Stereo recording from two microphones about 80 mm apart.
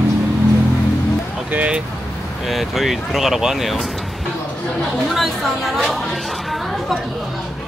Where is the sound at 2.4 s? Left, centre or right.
Centre.